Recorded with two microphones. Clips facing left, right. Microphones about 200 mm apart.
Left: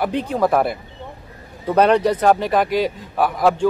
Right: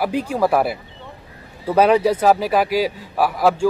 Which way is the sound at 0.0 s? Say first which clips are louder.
Even; 5° right (ahead or behind).